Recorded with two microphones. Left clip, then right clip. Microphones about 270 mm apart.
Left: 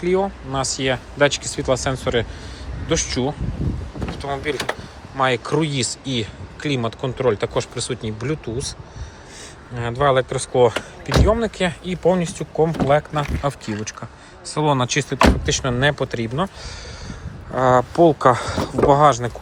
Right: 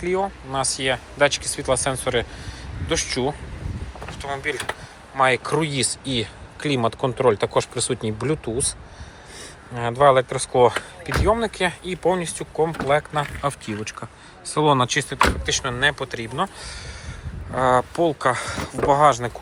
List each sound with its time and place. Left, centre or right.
0.0 s speech: centre
9.7 s speech: centre